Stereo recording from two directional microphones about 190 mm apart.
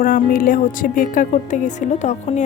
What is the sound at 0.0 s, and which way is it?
A woman's voice, 45° left (ahead or behind).